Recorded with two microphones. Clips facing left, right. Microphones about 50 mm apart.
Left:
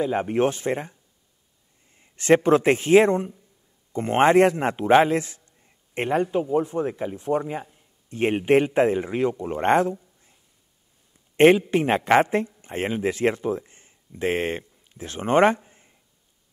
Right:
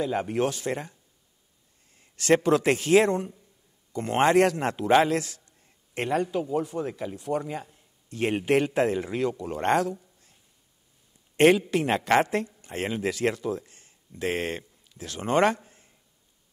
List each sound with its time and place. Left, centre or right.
0.0 s speech: left
2.0 s a man's voice: left
11.3 s a man's voice: left